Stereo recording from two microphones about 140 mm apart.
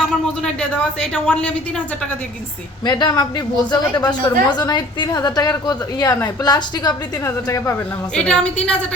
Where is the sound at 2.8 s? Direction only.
30° left (ahead or behind).